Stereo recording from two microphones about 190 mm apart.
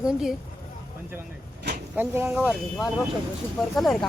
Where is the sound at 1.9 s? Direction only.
10° right (ahead or behind).